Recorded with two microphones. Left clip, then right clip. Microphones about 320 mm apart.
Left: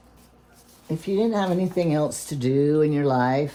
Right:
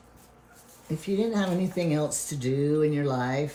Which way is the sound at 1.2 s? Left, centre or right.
Centre.